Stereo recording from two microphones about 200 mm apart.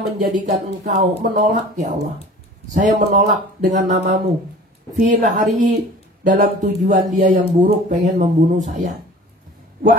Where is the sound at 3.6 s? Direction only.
40° right (ahead or behind).